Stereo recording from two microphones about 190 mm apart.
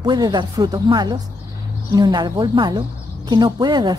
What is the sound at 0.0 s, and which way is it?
A woman's voice, 20° right (ahead or behind).